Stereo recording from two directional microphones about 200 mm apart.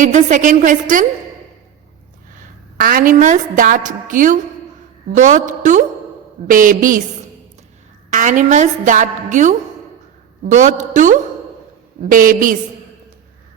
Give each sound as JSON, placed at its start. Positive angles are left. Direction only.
{"t": 0.0, "sound": "a woman's voice", "side_deg": -40}
{"t": 2.7, "sound": "a woman's voice", "side_deg": -45}
{"t": 8.1, "sound": "a woman's voice", "side_deg": -40}